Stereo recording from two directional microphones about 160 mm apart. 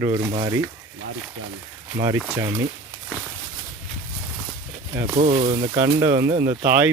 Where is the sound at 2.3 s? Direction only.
25° right (ahead or behind).